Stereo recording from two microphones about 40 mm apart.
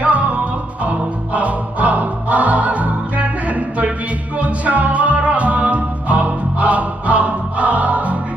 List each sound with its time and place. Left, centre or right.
0.0 s music: right